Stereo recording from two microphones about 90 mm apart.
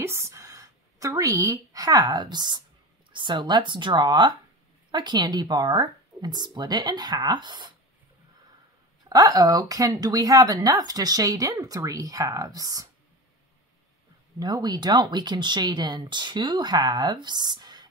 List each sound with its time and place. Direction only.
0.0 s a sound: 30° right (ahead or behind)
2.0 s speech: 50° right (ahead or behind)
9.1 s speech: 45° right (ahead or behind)
14.4 s speech: 50° right (ahead or behind)